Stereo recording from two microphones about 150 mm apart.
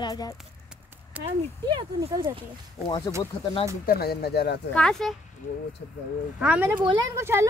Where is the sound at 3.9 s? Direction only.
90° left.